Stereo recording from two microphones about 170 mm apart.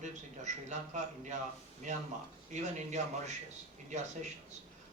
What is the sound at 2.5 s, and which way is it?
Speech, 45° right (ahead or behind).